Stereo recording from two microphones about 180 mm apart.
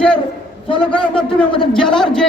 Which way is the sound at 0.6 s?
30° left (ahead or behind).